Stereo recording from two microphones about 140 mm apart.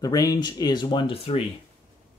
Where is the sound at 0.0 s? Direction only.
25° left (ahead or behind); by 1.4 s 45° left (ahead or behind).